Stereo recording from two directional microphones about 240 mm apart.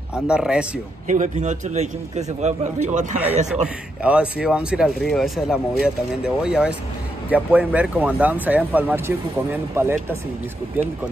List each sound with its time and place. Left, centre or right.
0.1 s speech: centre
1.0 s a man's voice: right
3.6 s speech: centre